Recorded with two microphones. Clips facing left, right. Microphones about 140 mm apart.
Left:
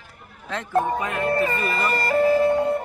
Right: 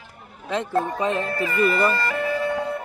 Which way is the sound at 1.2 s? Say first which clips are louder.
Even; 30° left (ahead or behind).